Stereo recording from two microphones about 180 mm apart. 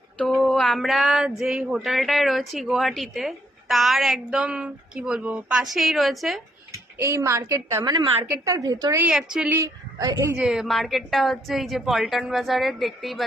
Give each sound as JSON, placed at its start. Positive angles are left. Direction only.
{"t": 0.4, "sound": "speech", "side_deg": 0}
{"t": 6.7, "sound": "a woman's voice", "side_deg": -15}
{"t": 9.0, "sound": "speech", "side_deg": -5}
{"t": 9.6, "sound": "speech", "side_deg": -20}
{"t": 10.3, "sound": "speech", "side_deg": -5}